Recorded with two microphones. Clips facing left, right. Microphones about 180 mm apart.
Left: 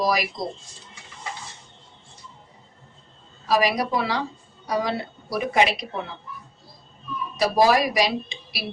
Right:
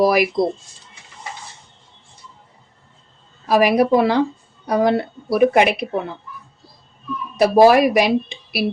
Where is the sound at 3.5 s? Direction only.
55° right (ahead or behind).